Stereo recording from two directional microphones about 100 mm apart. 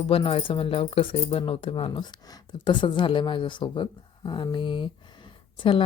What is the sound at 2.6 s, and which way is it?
A woman's voice, 50° left (ahead or behind).